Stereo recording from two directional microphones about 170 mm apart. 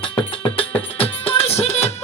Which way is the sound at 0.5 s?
35° left (ahead or behind).